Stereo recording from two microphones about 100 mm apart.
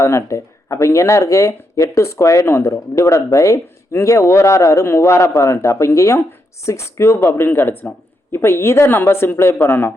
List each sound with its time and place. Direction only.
0.0 s speech: 30° left (ahead or behind)